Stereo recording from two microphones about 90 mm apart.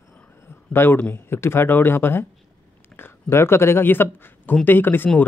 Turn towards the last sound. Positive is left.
turn(degrees=20)  # may be behind; listen again after turning